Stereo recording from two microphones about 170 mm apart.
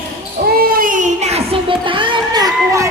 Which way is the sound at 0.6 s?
55° right (ahead or behind).